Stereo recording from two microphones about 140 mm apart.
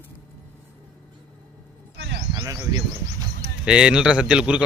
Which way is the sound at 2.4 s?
25° right (ahead or behind).